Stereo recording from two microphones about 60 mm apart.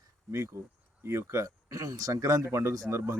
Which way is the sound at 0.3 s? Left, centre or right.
Right.